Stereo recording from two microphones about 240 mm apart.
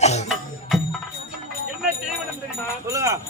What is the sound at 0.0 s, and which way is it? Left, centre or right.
Music, left.